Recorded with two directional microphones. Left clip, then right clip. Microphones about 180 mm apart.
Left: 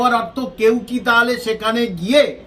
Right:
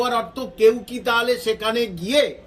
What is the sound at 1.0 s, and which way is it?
Speech, 10° left (ahead or behind).